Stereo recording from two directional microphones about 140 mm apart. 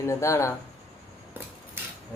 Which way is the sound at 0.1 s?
20° left (ahead or behind).